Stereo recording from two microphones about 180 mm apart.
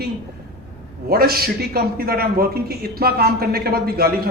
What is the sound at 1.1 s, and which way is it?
A man's voice, 60° right (ahead or behind).